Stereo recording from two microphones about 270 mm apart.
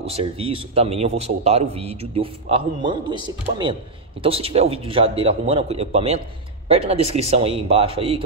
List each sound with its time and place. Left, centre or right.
0.0 s a man's voice: right